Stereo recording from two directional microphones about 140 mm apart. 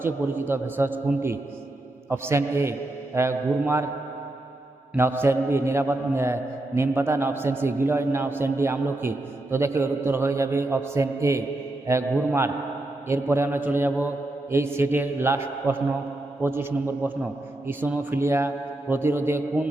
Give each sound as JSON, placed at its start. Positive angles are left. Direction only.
{"t": 0.0, "sound": "a man's voice", "side_deg": -15}
{"t": 4.9, "sound": "a man's voice", "side_deg": -15}
{"t": 13.1, "sound": "a man's voice", "side_deg": -20}